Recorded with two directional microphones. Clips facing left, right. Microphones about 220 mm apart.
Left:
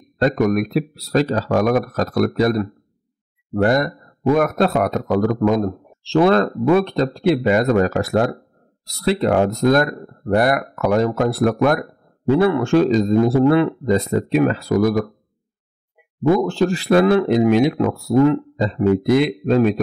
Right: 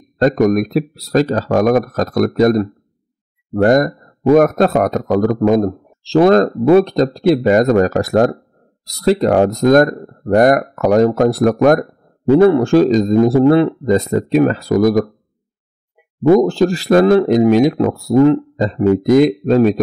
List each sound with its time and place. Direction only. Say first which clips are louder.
0.2 s a man's voice: right 4 dB; 40° right (ahead or behind)
13.8 s a man's voice: right 3 dB; 45° right (ahead or behind)
16.3 s a man's voice: right 5 dB; 35° right (ahead or behind)